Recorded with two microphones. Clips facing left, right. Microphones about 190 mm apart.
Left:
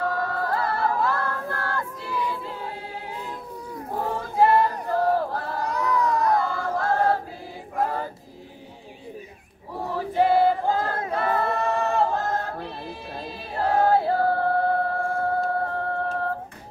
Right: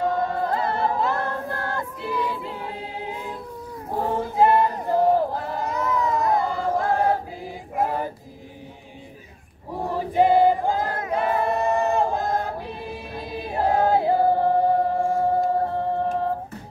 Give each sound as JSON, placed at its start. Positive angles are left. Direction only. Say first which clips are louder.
{"t": 0.0, "sound": "choir", "louder": "right 3 dB", "side_deg": -20}
{"t": 4.2, "sound": "a sound", "louder": "right 1 dB", "side_deg": -20}
{"t": 5.8, "sound": "child singing", "louder": "left 1 dB", "side_deg": -20}
{"t": 7.7, "sound": "female singing", "louder": "right 2 dB", "side_deg": -15}
{"t": 9.8, "sound": "choir", "louder": "right 2 dB", "side_deg": -15}
{"t": 11.1, "sound": "singing", "louder": "right 3 dB", "side_deg": -15}